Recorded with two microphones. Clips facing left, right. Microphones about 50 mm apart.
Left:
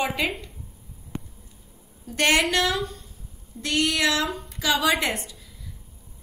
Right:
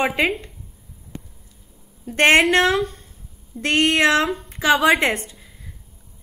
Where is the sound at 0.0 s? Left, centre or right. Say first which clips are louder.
Right 6 dB; right.